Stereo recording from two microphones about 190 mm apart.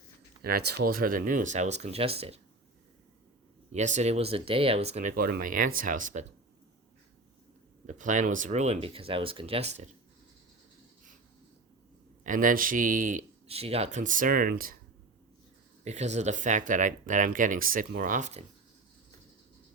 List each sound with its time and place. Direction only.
0.4 s speech: 55° right (ahead or behind); by 2.4 s 30° right (ahead or behind)
3.7 s speech: 40° right (ahead or behind)
7.9 s speech: 40° right (ahead or behind)
12.2 s speech: 45° right (ahead or behind)
13.5 s speech: 30° right (ahead or behind); by 14.8 s 50° right (ahead or behind)
15.8 s speech: 35° right (ahead or behind)